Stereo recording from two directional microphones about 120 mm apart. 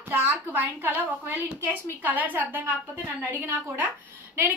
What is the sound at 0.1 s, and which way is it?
A woman's voice, 20° right (ahead or behind).